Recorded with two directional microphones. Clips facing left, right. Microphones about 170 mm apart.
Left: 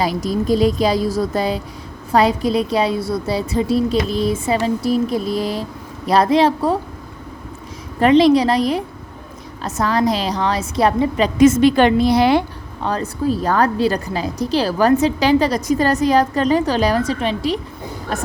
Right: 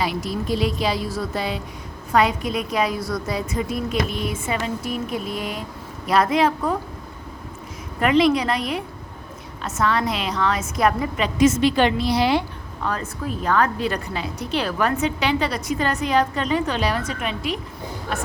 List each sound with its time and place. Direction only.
0.0 s a woman's voice: 40° left (ahead or behind)
7.9 s a woman's voice: 30° left (ahead or behind)
11.3 s a woman's voice: 50° left (ahead or behind)
12.8 s a woman's voice: 30° left (ahead or behind)